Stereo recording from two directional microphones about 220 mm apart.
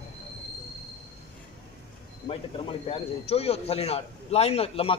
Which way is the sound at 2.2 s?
25° left (ahead or behind).